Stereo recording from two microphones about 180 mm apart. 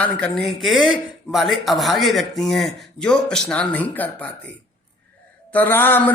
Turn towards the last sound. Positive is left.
turn(degrees=10)  # may be behind; listen again after turning